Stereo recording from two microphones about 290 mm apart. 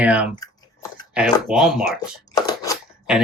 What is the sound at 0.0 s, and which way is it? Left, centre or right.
Speech, centre.